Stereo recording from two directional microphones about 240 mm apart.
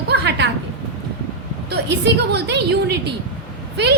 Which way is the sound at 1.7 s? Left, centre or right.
Right.